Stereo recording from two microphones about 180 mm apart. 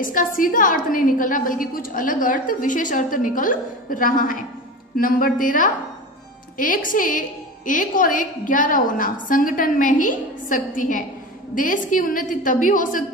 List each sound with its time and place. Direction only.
0.0 s a woman's voice: 50° left (ahead or behind)